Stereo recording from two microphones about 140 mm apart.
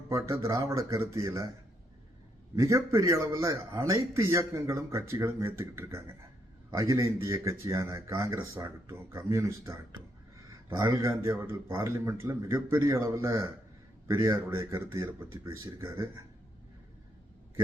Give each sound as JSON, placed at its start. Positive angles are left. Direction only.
{"t": 0.1, "sound": "speech", "side_deg": -20}
{"t": 2.6, "sound": "speech", "side_deg": -20}